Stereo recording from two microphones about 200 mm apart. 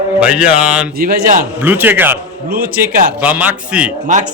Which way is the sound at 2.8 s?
5° right (ahead or behind).